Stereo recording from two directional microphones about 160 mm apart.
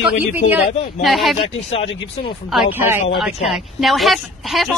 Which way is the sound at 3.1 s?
Centre (ahead or behind).